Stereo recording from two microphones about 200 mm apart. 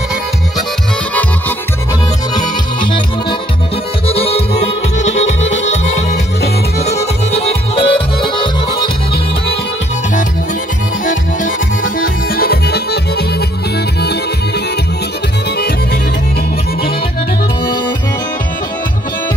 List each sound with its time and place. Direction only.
4.1 s music: 30° left (ahead or behind)
6.8 s music: 35° left (ahead or behind)
12.0 s music: 50° left (ahead or behind)